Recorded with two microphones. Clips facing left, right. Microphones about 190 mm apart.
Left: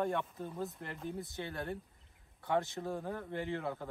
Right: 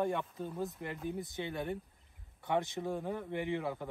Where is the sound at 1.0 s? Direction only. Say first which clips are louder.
Right 2 dB; 20° right (ahead or behind).